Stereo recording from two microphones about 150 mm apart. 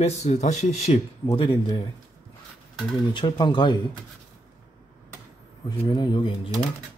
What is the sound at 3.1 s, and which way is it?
Speech, 30° left (ahead or behind).